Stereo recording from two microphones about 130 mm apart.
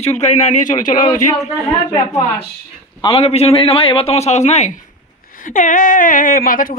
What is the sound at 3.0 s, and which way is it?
A man's voice, 50° left (ahead or behind).